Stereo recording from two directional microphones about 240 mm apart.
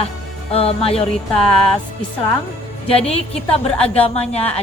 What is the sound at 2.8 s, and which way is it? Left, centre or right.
A woman's voice, left.